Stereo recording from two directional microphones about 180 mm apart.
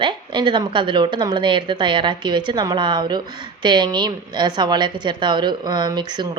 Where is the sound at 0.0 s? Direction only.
25° right (ahead or behind).